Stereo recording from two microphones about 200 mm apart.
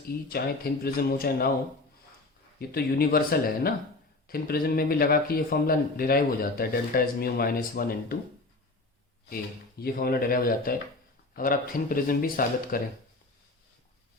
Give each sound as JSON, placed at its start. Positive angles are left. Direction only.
{"t": 0.3, "sound": "speech", "side_deg": 50}
{"t": 2.6, "sound": "speech", "side_deg": 50}
{"t": 9.8, "sound": "speech", "side_deg": 50}